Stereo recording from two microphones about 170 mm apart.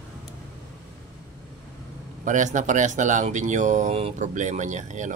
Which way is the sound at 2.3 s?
45° right (ahead or behind).